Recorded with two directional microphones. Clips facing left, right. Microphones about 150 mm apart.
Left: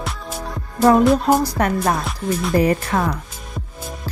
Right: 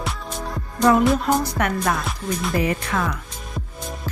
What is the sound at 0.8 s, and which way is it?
Music, 35° left (ahead or behind).